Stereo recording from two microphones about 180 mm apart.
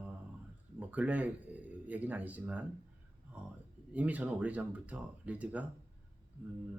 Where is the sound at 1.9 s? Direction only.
10° right (ahead or behind).